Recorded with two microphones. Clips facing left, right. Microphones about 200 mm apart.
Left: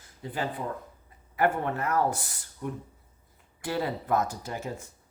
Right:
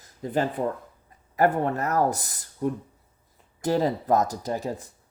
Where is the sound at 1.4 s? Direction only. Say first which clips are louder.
Right 4 dB; 40° right (ahead or behind).